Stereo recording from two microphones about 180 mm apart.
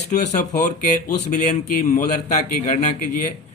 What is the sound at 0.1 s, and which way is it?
A man's voice, 40° left (ahead or behind).